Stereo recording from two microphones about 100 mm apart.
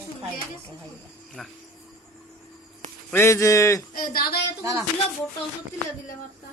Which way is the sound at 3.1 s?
30° left (ahead or behind).